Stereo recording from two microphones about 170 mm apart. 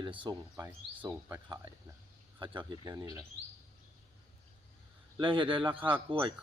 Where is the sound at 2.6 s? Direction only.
25° right (ahead or behind).